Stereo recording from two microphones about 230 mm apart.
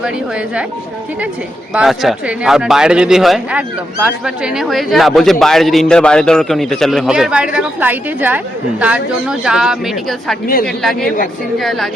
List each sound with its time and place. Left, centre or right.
0.0 s a man's voice: centre
1.7 s a man's voice: centre
10.4 s a woman's voice: left
10.7 s a man's voice: centre